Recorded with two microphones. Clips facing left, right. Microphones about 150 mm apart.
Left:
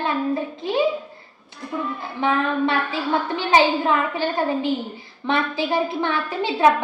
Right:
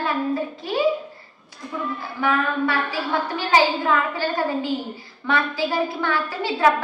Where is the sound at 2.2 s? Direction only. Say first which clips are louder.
Left 1 dB; 25° left (ahead or behind).